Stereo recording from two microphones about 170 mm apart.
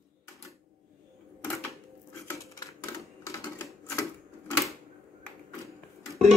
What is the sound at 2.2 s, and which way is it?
Dishes, 15° left (ahead or behind).